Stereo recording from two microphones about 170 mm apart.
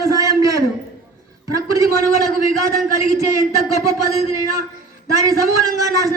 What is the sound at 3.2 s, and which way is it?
A man's voice, 20° right (ahead or behind).